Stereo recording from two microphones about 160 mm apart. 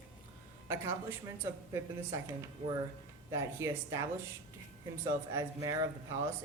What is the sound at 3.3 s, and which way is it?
Speech, 15° right (ahead or behind).